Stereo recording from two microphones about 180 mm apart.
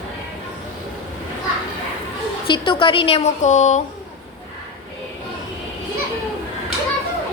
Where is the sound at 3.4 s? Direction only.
40° left (ahead or behind).